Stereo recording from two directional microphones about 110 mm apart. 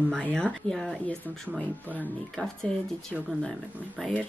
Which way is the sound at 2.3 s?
5° left (ahead or behind).